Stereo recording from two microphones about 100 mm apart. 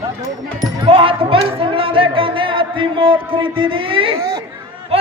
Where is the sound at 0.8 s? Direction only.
60° right (ahead or behind).